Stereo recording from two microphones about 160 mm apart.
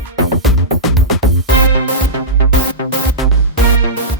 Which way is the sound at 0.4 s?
Centre (ahead or behind).